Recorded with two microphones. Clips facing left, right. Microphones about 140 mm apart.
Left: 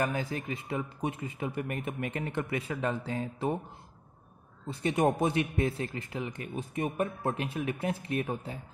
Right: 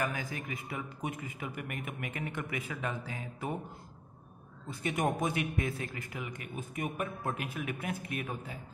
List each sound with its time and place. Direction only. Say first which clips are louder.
0.0 s speech: left 4 dB; 30° left (ahead or behind)
4.6 s speech: left 5 dB; 30° left (ahead or behind)